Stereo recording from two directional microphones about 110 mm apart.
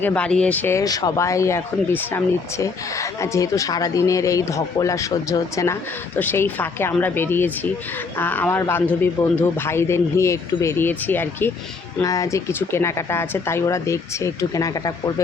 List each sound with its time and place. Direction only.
0.0 s speech: 10° left (ahead or behind)
0.8 s speech: 30° left (ahead or behind)
6.1 s speech: 20° left (ahead or behind)
12.0 s speech: 30° left (ahead or behind)